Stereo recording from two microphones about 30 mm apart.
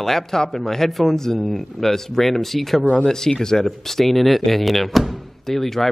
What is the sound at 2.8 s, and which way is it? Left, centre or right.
Speech, left.